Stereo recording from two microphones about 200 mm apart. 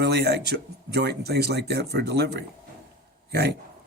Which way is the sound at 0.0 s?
55° right (ahead or behind).